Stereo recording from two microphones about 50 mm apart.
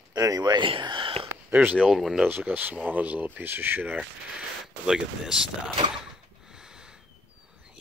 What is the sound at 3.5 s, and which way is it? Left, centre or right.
Speech, right.